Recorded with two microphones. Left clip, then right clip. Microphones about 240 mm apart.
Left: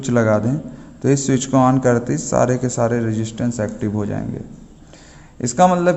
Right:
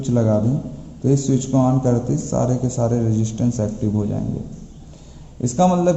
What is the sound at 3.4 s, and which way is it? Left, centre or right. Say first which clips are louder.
Speech: left 1 dB; left.